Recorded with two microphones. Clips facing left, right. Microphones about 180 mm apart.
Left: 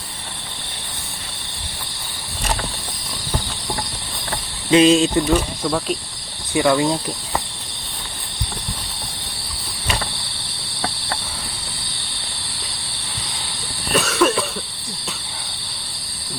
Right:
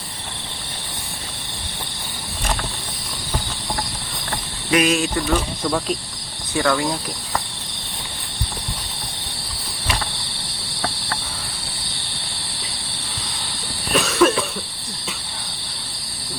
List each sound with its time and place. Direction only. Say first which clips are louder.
4.7 s speech: left 6 dB; 25° left (ahead or behind)
5.6 s insect: left 1 dB; centre (ahead or behind)
6.5 s speech: left 3 dB; 15° left (ahead or behind)
13.9 s cough: right 1 dB; centre (ahead or behind)